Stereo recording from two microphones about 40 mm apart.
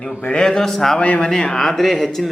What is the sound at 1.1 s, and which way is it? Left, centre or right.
Speech, centre.